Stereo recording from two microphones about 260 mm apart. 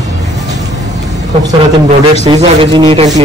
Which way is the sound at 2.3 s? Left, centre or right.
Centre.